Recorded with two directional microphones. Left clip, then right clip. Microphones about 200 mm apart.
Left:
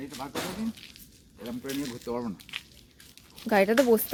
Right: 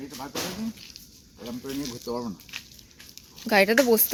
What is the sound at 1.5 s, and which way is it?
Speech, centre (ahead or behind).